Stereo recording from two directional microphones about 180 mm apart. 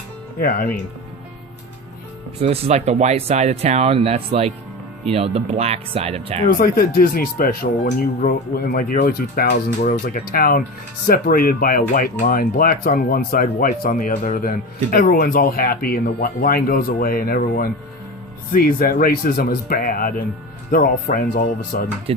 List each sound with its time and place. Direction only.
0.3 s speech: 50° left (ahead or behind)
2.4 s speech: 35° right (ahead or behind)
6.6 s speech: 55° left (ahead or behind)